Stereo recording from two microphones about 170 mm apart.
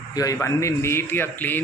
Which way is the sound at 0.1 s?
20° left (ahead or behind).